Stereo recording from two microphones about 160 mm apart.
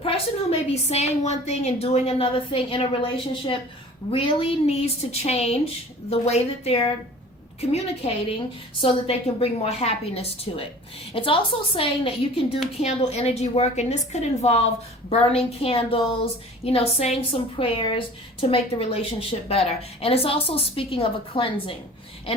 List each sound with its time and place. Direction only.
0.0 s a woman's voice: 40° left (ahead or behind)